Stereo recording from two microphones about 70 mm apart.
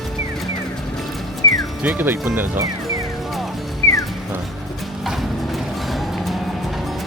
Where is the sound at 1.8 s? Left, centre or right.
Right.